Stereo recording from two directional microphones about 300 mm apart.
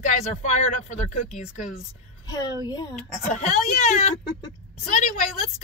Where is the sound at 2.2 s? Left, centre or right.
Centre.